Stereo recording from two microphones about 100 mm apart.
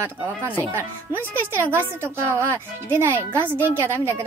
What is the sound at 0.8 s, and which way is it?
Speech, 20° right (ahead or behind).